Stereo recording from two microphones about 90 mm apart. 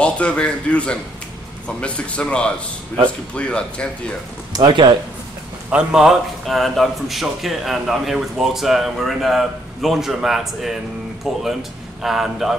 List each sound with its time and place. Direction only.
0.0 s speech: 10° left (ahead or behind)
4.5 s a sound: 45° right (ahead or behind)
5.7 s a man's voice: 10° right (ahead or behind)